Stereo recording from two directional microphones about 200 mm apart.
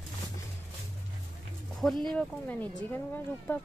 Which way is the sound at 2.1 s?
10° left (ahead or behind).